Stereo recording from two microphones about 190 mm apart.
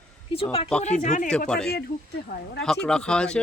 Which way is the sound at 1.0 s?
40° left (ahead or behind).